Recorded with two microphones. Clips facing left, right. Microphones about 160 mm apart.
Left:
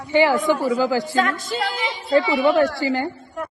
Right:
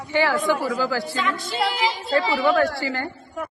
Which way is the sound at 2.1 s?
20° left (ahead or behind).